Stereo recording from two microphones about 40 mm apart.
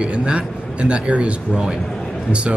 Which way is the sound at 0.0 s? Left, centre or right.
Right.